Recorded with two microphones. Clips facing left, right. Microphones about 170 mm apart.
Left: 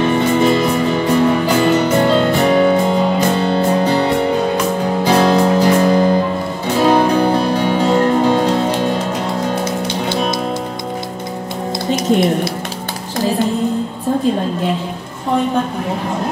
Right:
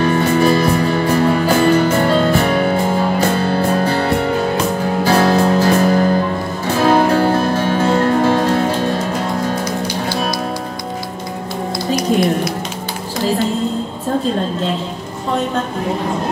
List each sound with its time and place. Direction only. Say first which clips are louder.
0.0 s music: even; 20° left (ahead or behind)
11.9 s music: left 1 dB; 25° left (ahead or behind)